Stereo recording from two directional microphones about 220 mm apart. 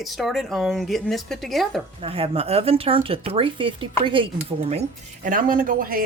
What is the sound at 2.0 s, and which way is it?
Speech, 25° right (ahead or behind).